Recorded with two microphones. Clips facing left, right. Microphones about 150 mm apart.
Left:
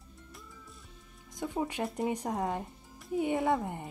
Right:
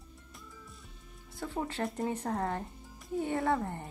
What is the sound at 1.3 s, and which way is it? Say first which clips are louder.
Speech: left 2 dB; 15° left (ahead or behind).